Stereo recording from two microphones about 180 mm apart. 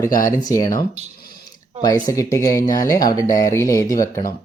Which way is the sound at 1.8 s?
20° left (ahead or behind).